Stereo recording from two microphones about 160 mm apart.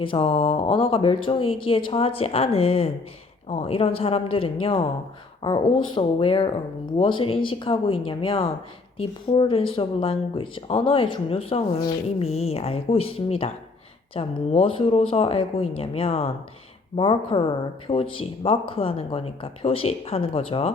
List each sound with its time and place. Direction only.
0.0 s speech: 35° left (ahead or behind)